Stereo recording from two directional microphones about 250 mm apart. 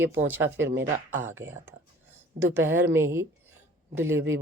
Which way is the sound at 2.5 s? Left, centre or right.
Centre.